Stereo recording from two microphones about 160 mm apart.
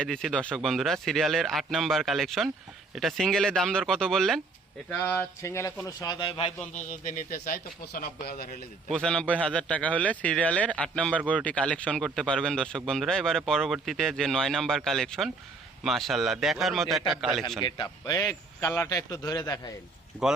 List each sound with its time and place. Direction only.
0.0 s a man's voice: 5° left (ahead or behind); by 6.5 s 35° left (ahead or behind)
6.7 s a man's voice: 55° left (ahead or behind)
8.9 s a man's voice: 5° left (ahead or behind)
17.6 s a man's voice: 30° left (ahead or behind)
18.3 s a man's voice: 10° left (ahead or behind)